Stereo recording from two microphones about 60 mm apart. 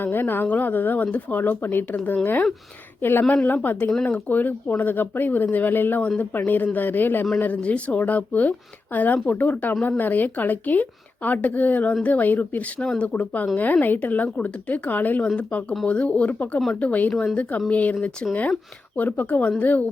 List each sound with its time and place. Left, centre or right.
0.0 s speech: left
6.0 s speech: left
17.1 s speech: centre
17.7 s speech: left